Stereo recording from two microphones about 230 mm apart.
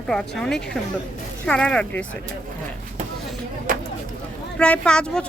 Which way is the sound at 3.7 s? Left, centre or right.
Right.